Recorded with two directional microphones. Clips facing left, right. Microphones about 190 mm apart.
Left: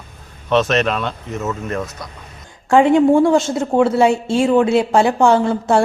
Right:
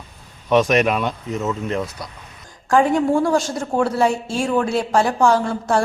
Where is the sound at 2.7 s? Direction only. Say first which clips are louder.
Left 5 dB; 25° left (ahead or behind).